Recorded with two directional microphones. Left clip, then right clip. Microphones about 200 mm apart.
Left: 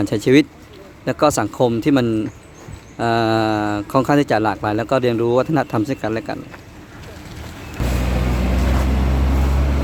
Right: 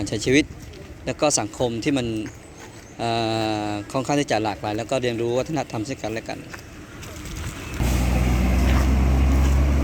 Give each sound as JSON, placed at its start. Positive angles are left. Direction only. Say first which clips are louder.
{"t": 0.0, "sound": "speech", "louder": "left 6 dB", "side_deg": 30}
{"t": 7.9, "sound": "vehicle", "louder": "left 3 dB", "side_deg": 0}